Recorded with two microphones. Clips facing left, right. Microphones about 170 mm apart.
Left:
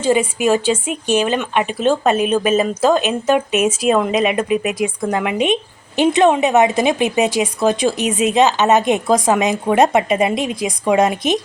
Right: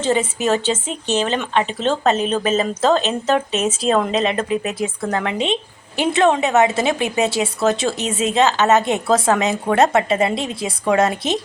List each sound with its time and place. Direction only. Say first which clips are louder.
0.0 s speech: left 3 dB; 10° left (ahead or behind)